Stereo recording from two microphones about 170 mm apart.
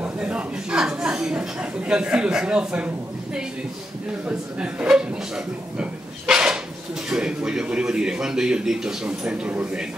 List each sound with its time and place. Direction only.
0.0 s a woman's voice: 5° right (ahead or behind)
4.3 s a man's voice: 5° right (ahead or behind)